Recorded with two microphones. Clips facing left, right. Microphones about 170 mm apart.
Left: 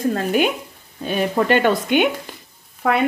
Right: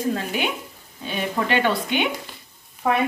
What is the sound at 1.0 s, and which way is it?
Frying, 50° left (ahead or behind).